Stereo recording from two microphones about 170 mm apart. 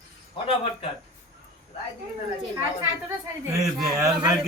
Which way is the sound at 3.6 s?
Centre (ahead or behind).